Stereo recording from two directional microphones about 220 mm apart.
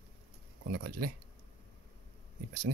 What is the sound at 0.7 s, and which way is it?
Speech, 40° right (ahead or behind).